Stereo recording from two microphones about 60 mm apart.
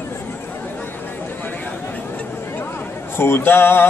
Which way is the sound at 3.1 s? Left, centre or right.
Left.